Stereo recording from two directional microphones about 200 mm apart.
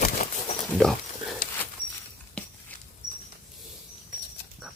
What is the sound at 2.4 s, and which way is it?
Patter, 5° left (ahead or behind).